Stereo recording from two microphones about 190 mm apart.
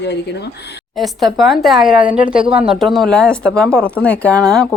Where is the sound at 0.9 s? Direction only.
Centre (ahead or behind).